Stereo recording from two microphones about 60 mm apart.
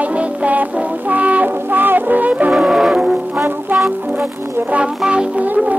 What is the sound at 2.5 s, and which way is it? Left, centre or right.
Music, centre.